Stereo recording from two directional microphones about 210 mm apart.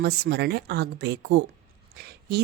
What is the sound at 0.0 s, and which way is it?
Speech, 50° right (ahead or behind).